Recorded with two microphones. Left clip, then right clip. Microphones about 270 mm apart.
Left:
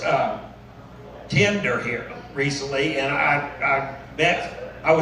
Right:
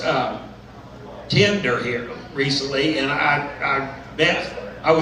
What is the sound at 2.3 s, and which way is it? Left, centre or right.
Speech, centre.